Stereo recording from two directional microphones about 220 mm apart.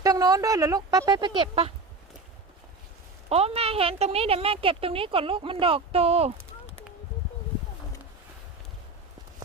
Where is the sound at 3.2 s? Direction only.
25° right (ahead or behind).